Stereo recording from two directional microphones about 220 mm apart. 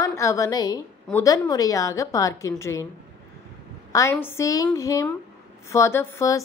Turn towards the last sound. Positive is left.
turn(degrees=15)  # may be behind; listen again after turning